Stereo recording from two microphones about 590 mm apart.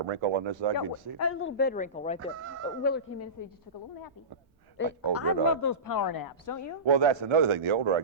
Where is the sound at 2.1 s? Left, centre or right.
Right.